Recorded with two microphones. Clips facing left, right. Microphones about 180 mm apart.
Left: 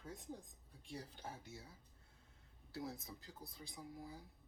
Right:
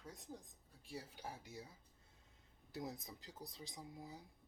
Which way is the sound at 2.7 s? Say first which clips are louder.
Even; 20° right (ahead or behind).